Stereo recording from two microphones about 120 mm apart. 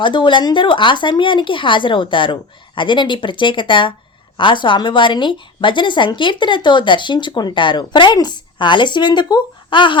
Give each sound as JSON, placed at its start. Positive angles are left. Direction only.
{"t": 0.0, "sound": "a woman's voice", "side_deg": 40}